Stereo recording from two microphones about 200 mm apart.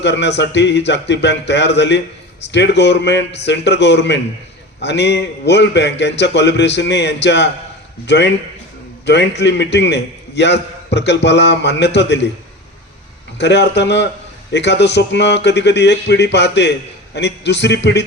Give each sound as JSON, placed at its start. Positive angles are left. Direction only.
{"t": 0.0, "sound": "a man's voice", "side_deg": 60}
{"t": 13.4, "sound": "a man's voice", "side_deg": 60}